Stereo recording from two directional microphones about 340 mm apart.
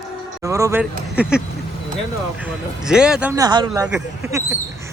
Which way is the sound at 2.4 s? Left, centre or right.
Centre.